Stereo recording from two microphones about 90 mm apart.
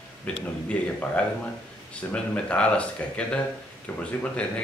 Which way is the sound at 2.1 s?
15° left (ahead or behind).